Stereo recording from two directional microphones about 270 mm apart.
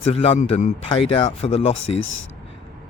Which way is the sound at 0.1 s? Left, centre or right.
Left.